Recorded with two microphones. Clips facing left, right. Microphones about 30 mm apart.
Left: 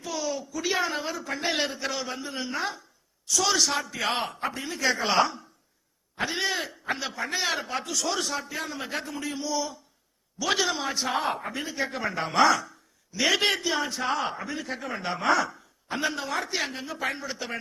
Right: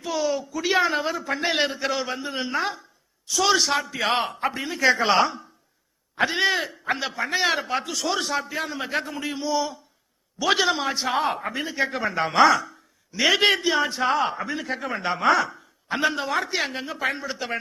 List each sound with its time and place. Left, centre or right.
0.0 s a man's voice: centre